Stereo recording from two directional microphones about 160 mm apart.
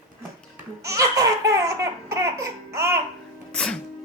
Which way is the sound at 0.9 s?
20° right (ahead or behind).